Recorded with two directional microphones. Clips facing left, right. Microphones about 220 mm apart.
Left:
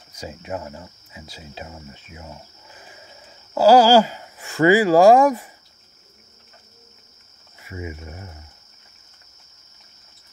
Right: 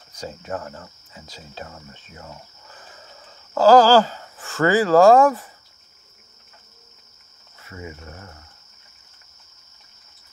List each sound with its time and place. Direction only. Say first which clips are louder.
0.1 s speech: even; 10° left (ahead or behind)
2.1 s a sound: right 1 dB; 10° left (ahead or behind)
3.5 s speech: even; 10° left (ahead or behind)
7.6 s speech: left 3 dB; 15° left (ahead or behind)